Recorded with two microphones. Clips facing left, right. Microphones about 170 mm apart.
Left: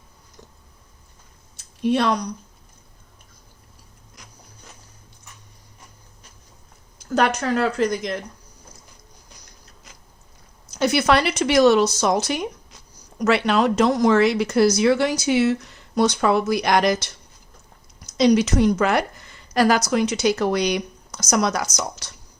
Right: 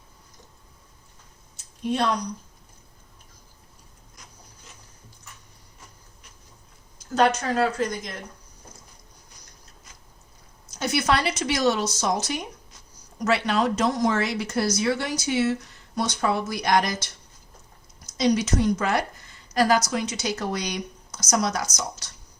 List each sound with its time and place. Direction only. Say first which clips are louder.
1.8 s speech: left 5 dB; 80° left
7.0 s speech: left 1 dB; 65° left (ahead or behind)
10.8 s a woman's voice: left 5 dB; 75° left (ahead or behind)